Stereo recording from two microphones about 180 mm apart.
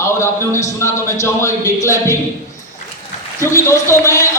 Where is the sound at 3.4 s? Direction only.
15° left (ahead or behind).